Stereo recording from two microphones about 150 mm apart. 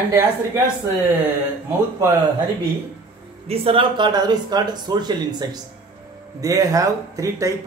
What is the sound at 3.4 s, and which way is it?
Speech, 40° right (ahead or behind).